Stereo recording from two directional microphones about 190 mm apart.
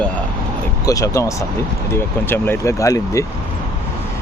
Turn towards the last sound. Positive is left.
turn(degrees=15)  # may be behind; listen again after turning